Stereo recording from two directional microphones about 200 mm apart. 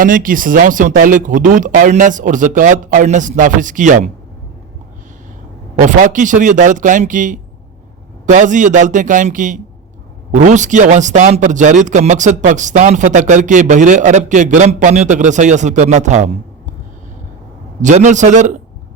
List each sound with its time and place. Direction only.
0.0 s a man's voice: 45° right (ahead or behind)
5.8 s a man's voice: 40° right (ahead or behind)
17.8 s a man's voice: 35° right (ahead or behind)